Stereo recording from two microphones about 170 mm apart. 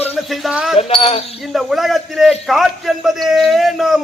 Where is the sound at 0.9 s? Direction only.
35° left (ahead or behind).